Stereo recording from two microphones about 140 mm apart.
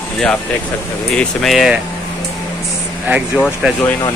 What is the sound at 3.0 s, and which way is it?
Speech, 10° right (ahead or behind).